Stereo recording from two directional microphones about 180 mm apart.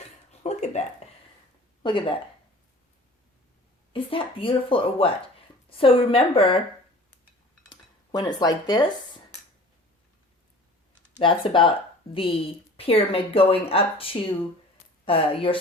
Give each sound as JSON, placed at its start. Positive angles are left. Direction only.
{"t": 0.3, "sound": "a sound", "side_deg": 40}
{"t": 1.8, "sound": "speech", "side_deg": 25}
{"t": 3.9, "sound": "speech", "side_deg": 30}
{"t": 7.7, "sound": "speech", "side_deg": 25}
{"t": 11.2, "sound": "speech", "side_deg": 30}
{"t": 12.7, "sound": "speech", "side_deg": 30}